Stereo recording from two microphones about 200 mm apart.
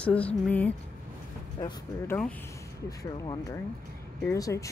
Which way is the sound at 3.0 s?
15° left (ahead or behind).